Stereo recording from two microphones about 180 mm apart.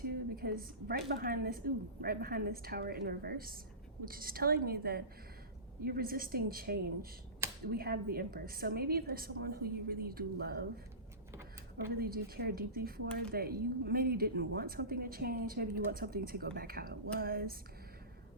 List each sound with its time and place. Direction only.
0.0 s a woman's voice: 55° right (ahead or behind)
11.9 s speech: 55° right (ahead or behind)